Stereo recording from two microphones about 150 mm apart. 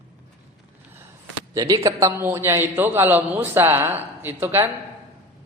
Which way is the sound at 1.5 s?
25° right (ahead or behind).